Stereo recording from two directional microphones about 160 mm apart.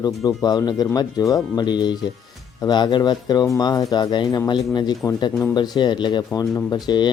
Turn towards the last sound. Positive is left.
turn(degrees=25)  # may be behind; listen again after turning